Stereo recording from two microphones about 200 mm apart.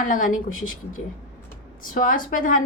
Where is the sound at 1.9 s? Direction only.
45° left (ahead or behind).